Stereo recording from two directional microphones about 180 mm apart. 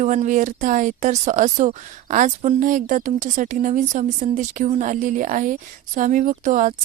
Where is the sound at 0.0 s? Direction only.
40° right (ahead or behind).